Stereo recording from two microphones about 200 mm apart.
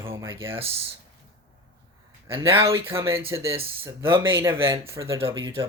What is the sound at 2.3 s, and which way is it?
Speech, 25° right (ahead or behind).